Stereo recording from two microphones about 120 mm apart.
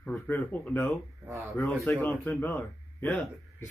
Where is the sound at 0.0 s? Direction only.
15° left (ahead or behind).